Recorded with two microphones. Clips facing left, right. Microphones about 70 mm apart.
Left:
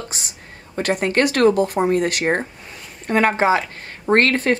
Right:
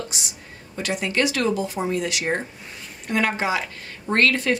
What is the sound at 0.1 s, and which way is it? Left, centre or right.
A woman's voice, left.